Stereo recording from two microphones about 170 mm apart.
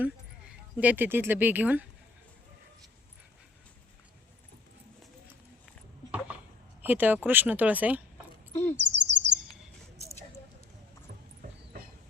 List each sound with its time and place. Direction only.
0.0 s speech: 10° right (ahead or behind)
6.8 s speech: 10° right (ahead or behind)
8.7 s bird vocalization: 90° right